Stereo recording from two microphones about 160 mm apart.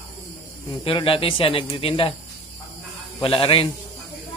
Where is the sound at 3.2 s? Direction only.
35° left (ahead or behind).